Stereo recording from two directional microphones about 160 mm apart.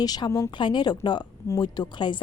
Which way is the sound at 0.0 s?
25° left (ahead or behind).